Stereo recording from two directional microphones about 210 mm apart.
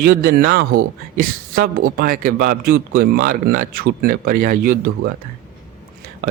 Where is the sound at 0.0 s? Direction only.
45° right (ahead or behind).